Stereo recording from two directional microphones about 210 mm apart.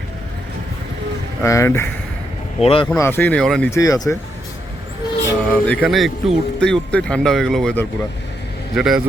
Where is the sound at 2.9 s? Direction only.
10° left (ahead or behind).